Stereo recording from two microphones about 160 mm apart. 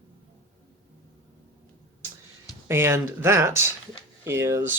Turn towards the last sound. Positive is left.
turn(degrees=-15)  # may be behind; listen again after turning